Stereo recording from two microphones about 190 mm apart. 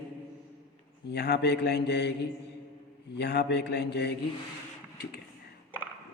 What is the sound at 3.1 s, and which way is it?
A man's voice, 60° left (ahead or behind).